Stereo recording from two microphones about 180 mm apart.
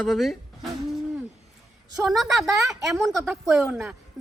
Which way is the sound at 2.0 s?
Centre (ahead or behind).